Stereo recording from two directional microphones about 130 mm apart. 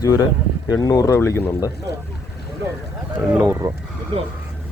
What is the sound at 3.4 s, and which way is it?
Speech, 25° right (ahead or behind).